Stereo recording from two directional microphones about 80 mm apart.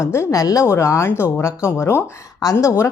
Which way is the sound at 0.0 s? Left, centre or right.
Left.